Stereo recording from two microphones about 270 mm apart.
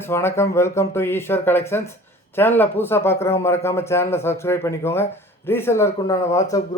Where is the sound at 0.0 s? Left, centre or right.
Centre.